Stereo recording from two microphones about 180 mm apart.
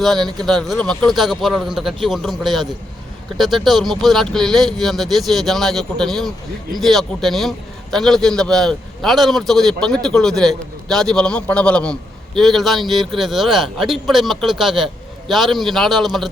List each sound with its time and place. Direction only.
0.2 s speech: 25° right (ahead or behind)
0.4 s a man's voice: centre (ahead or behind)